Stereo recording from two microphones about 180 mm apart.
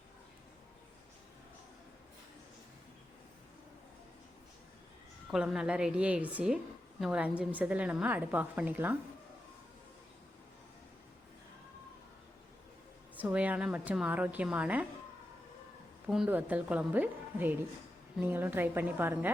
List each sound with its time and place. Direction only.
5.3 s a woman's voice: 5° right (ahead or behind)
13.1 s a woman's voice: 10° right (ahead or behind)
16.0 s a woman's voice: 5° right (ahead or behind)